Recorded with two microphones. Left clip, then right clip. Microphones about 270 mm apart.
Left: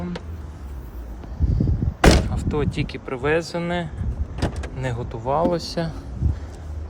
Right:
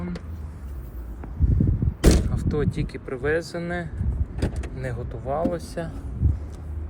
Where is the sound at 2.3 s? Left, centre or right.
Centre.